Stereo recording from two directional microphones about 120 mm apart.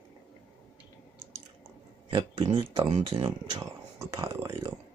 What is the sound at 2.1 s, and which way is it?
Speech, 45° right (ahead or behind).